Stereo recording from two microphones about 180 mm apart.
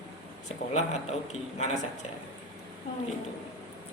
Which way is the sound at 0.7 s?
35° left (ahead or behind).